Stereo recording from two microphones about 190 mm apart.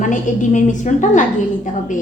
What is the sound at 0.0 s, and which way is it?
A woman's voice, 40° left (ahead or behind).